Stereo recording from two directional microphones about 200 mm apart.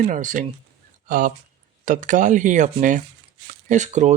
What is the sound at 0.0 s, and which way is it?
Speech, 40° right (ahead or behind).